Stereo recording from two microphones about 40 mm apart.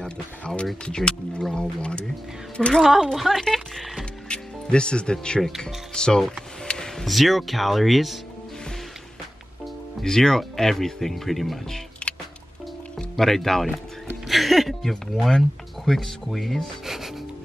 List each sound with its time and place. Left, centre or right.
0.8 s speech: left
2.8 s speech: centre
4.3 s speech: left
6.7 s a sound: centre
7.1 s speech: centre
10.0 s speech: centre
12.9 s speech: centre
16.8 s music: centre